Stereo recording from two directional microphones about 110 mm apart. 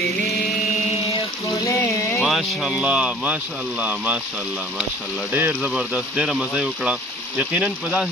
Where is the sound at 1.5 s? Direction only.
25° left (ahead or behind).